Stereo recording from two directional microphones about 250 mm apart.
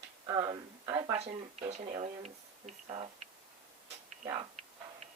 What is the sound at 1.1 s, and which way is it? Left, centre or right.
Speech, right.